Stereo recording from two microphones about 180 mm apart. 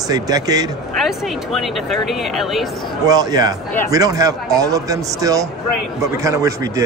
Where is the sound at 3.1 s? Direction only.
20° right (ahead or behind).